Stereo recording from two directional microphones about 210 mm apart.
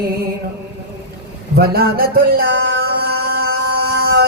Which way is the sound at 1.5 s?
45° right (ahead or behind).